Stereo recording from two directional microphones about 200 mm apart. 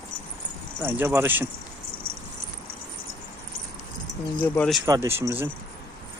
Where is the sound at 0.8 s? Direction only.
10° right (ahead or behind).